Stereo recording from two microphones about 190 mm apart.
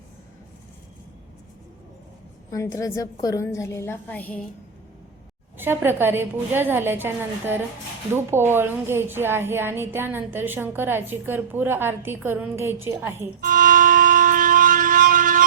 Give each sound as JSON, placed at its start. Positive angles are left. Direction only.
{"t": 2.5, "sound": "a woman's voice", "side_deg": 15}
{"t": 5.5, "sound": "a woman's voice", "side_deg": -10}
{"t": 13.4, "sound": "music", "side_deg": -45}